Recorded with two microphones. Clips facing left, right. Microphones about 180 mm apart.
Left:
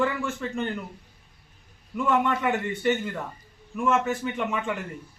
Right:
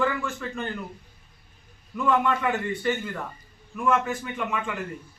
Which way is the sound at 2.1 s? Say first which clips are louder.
Right 1 dB; 25° left (ahead or behind).